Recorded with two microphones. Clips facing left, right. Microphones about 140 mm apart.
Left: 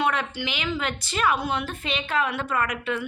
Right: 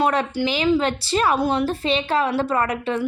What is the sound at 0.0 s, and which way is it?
Speech, 35° right (ahead or behind).